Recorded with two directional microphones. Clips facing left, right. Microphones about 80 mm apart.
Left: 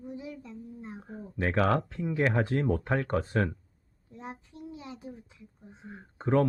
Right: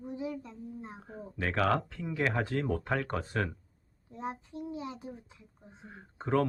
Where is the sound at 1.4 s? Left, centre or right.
Left.